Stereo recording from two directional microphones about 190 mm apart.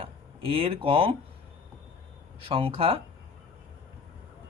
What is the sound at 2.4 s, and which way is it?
Speech, 30° right (ahead or behind).